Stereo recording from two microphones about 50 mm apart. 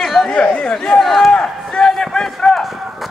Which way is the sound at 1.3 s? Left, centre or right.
Centre.